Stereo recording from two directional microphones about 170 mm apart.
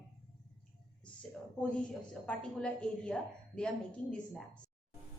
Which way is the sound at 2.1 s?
5° left (ahead or behind).